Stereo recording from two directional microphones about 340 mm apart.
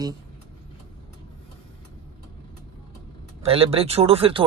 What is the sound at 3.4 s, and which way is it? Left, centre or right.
Speech, centre.